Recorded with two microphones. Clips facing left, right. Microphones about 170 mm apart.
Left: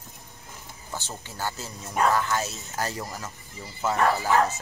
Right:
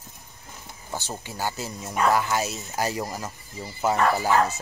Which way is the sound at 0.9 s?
10° right (ahead or behind).